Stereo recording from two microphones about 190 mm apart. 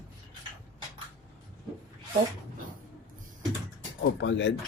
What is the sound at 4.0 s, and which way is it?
Speech, 70° left (ahead or behind).